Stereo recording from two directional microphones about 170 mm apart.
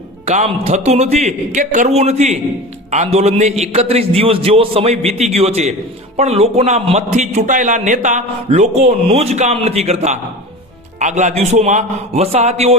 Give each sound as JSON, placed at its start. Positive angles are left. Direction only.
{"t": 0.3, "sound": "a man's voice", "side_deg": -40}